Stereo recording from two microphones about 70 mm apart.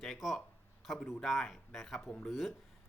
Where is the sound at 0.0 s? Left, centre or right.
Centre.